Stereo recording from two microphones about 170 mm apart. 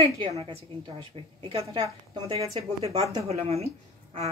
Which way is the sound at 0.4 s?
30° right (ahead or behind).